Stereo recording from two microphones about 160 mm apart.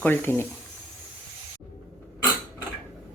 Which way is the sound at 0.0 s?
10° left (ahead or behind).